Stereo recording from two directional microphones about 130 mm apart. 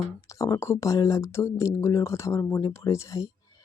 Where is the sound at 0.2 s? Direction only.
25° left (ahead or behind).